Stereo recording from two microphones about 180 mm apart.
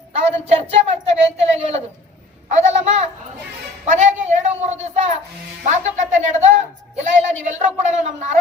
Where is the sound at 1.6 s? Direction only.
35° right (ahead or behind).